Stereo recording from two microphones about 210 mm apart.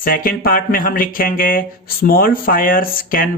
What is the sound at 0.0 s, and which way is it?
Speech, 45° left (ahead or behind).